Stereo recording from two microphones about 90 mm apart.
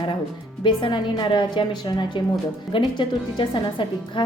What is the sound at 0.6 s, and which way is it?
A woman's voice, 65° left (ahead or behind).